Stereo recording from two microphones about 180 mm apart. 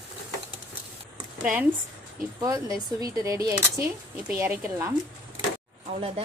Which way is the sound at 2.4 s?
20° right (ahead or behind).